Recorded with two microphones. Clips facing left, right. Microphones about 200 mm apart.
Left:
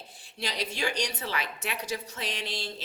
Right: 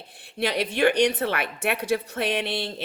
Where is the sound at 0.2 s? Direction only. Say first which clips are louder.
Right 9 dB; 60° right (ahead or behind).